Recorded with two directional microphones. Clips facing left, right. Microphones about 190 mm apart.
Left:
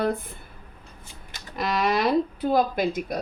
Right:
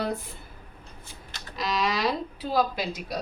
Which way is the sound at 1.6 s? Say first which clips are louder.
Left 3 dB; 55° left (ahead or behind).